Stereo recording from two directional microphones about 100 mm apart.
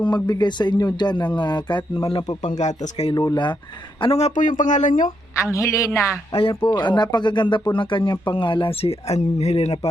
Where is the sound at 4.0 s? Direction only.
85° left.